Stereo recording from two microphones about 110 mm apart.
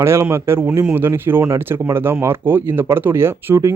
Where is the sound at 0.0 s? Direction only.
25° right (ahead or behind).